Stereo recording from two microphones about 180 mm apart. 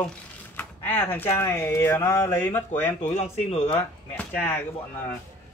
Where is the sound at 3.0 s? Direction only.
40° left (ahead or behind).